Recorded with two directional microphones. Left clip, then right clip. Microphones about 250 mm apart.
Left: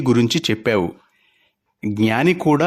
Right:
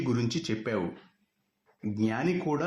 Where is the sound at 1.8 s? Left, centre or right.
Left.